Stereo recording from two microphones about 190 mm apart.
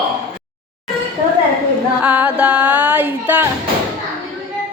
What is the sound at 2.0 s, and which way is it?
Music, 10° right (ahead or behind).